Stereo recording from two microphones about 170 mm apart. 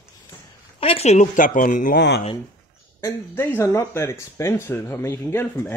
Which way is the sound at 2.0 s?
85° left.